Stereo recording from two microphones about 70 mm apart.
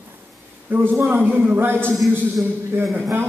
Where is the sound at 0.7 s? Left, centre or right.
Right.